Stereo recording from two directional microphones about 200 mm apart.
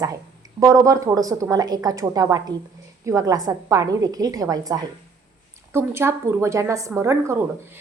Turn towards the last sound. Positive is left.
turn(degrees=-15)  # may be behind; listen again after turning